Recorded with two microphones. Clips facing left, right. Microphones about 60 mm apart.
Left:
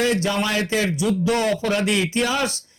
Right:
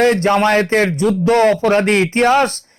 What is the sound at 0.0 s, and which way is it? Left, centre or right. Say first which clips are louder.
Speech: right 8 dB; right.